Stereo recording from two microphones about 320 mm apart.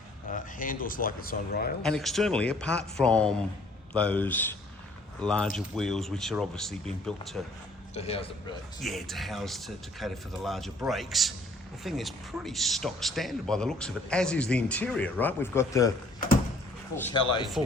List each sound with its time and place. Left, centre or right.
0.3 s speech: left
1.8 s speech: centre
7.9 s speech: centre
8.8 s speech: centre
16.9 s speech: centre